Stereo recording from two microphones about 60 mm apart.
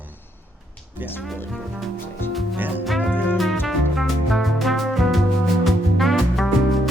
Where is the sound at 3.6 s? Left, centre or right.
Centre.